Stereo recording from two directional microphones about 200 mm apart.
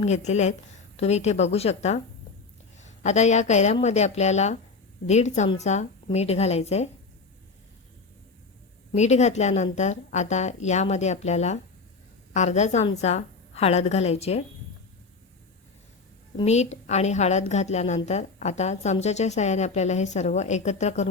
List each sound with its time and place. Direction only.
0.0 s a woman's voice: 35° left (ahead or behind)
8.9 s a woman's voice: 35° left (ahead or behind)
16.4 s a woman's voice: 35° left (ahead or behind)